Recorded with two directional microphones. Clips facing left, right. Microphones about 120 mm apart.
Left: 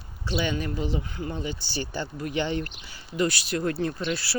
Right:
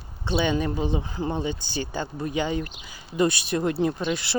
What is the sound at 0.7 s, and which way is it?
Speech, 20° right (ahead or behind).